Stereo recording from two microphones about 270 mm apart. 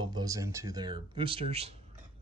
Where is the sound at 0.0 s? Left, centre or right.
Centre.